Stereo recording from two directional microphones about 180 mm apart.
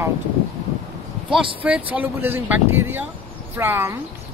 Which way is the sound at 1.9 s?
10° right (ahead or behind).